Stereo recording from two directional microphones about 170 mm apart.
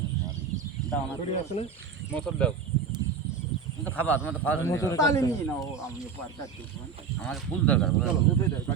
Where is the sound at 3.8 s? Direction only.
10° left (ahead or behind).